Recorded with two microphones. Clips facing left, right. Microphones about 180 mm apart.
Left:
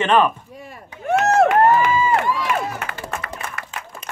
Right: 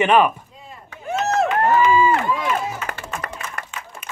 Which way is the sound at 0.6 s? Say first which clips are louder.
Left 4 dB; 70° left (ahead or behind).